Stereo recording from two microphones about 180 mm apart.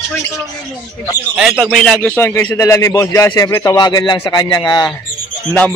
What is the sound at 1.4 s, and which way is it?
A man's voice, 5° right (ahead or behind).